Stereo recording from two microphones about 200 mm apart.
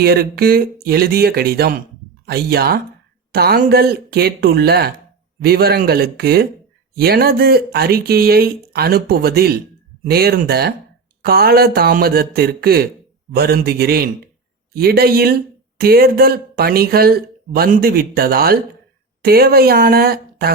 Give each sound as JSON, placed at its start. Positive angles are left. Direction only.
{"t": 0.0, "sound": "speech", "side_deg": -50}